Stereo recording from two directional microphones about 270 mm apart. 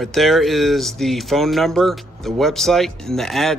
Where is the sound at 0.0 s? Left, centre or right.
Centre.